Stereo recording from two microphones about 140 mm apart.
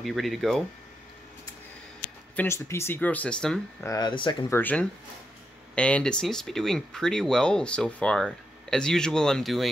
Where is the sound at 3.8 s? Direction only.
25° left (ahead or behind).